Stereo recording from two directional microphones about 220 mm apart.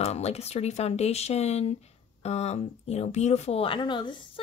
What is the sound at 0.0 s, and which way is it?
A woman's voice, 30° left (ahead or behind).